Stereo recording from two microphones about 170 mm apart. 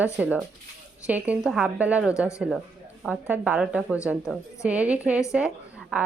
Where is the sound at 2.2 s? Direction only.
15° left (ahead or behind).